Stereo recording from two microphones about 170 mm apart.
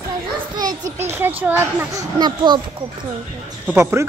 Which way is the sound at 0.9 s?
15° right (ahead or behind).